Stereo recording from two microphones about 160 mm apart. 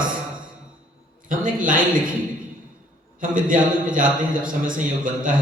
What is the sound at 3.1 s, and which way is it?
A man's voice, 60° right (ahead or behind).